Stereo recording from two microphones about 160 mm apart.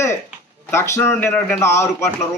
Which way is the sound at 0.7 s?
15° left (ahead or behind).